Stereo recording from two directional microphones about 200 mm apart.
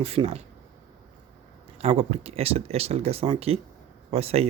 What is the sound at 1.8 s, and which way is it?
Speech, 30° right (ahead or behind).